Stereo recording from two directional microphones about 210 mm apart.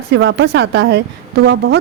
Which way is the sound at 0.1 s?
55° right (ahead or behind).